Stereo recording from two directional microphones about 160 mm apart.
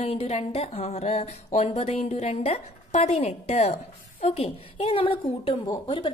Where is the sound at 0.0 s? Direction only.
40° left (ahead or behind).